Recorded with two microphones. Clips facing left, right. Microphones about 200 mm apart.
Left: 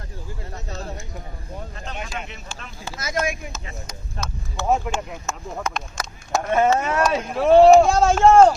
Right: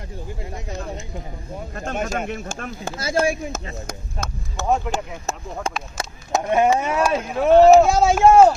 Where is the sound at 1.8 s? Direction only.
45° right (ahead or behind).